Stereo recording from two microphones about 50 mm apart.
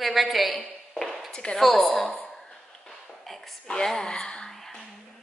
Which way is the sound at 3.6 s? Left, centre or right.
Centre.